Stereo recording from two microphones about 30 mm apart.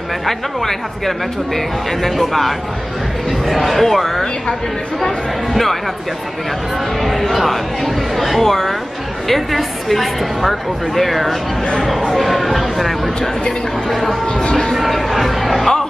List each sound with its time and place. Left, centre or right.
0.3 s a woman's voice: centre
5.5 s a woman's voice: centre
7.0 s a woman's voice: centre
14.2 s speech: left
14.7 s music: centre